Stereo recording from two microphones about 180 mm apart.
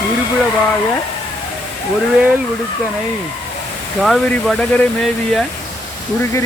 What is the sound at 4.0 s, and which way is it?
Speech, centre (ahead or behind).